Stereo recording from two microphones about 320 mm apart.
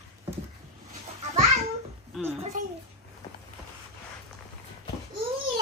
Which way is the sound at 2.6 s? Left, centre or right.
Right.